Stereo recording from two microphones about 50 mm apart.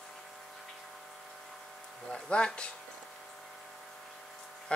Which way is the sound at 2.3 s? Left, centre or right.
Left.